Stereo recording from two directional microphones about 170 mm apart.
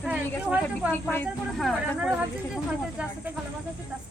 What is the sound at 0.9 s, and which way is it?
Speech, 10° left (ahead or behind).